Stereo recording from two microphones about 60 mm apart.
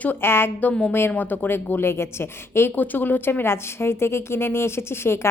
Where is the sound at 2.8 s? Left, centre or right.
Left.